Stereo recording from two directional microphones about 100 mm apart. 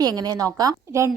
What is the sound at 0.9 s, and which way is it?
Speech, 30° right (ahead or behind).